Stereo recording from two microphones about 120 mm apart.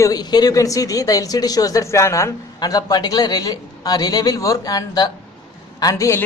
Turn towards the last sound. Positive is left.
turn(degrees=25)  # may be behind; listen again after turning